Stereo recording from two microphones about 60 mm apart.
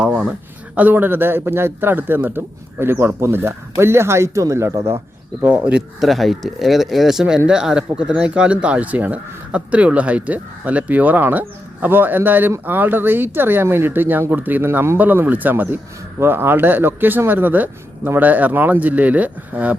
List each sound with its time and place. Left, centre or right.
0.8 s a man's voice: right
5.4 s speech: right
6.0 s a man's voice: centre; by 19.7 s right